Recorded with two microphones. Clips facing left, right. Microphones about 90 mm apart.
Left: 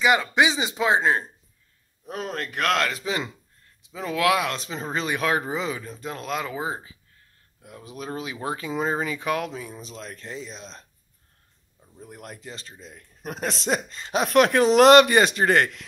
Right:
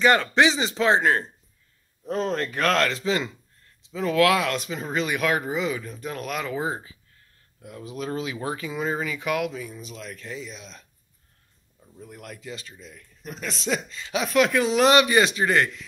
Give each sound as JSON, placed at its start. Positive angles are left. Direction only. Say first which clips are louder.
{"t": 0.0, "sound": "speech", "louder": "right 1 dB", "side_deg": 5}
{"t": 7.9, "sound": "speech", "louder": "right 3 dB", "side_deg": 20}
{"t": 12.0, "sound": "speech", "louder": "even", "side_deg": 30}
{"t": 13.2, "sound": "speech", "louder": "left 3 dB", "side_deg": 60}
{"t": 14.7, "sound": "speech", "louder": "left 8 dB", "side_deg": 60}